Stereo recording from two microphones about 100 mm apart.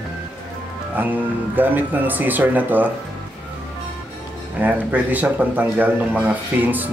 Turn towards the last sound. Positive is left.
turn(degrees=-15)  # may be behind; listen again after turning